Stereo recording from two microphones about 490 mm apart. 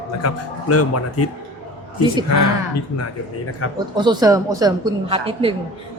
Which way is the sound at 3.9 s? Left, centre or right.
Centre.